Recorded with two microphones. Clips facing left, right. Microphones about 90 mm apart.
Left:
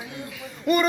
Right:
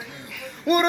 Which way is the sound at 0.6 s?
55° right (ahead or behind).